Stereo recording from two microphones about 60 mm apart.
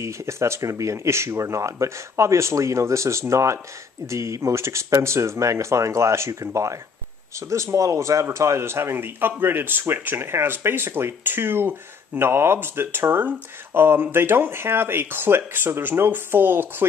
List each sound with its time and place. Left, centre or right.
0.0 s speech: right